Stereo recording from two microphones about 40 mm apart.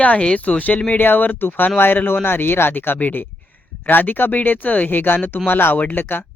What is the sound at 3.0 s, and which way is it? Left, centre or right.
Speech, left.